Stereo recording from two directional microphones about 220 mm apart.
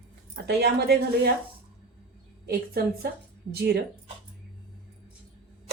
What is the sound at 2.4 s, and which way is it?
Speech, 45° right (ahead or behind).